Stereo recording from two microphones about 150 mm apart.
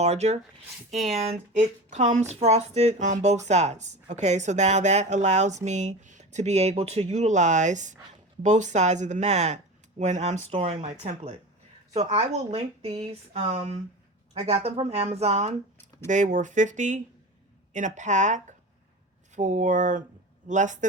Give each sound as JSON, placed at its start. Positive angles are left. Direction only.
{"t": 0.0, "sound": "speech", "side_deg": -45}